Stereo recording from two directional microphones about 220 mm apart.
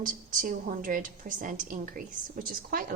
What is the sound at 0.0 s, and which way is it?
A woman's voice, 35° right (ahead or behind).